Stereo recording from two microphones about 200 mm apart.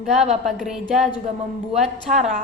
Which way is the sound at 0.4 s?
Centre (ahead or behind).